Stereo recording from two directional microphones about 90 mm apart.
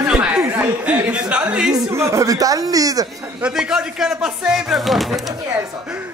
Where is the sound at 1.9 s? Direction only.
35° right (ahead or behind).